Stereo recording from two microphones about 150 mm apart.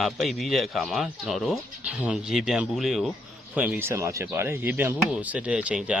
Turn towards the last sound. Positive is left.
turn(degrees=-5)  # may be behind; listen again after turning